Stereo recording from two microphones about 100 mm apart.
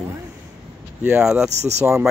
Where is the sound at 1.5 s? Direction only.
90° right.